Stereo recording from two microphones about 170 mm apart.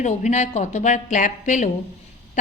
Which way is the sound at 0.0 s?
45° left (ahead or behind).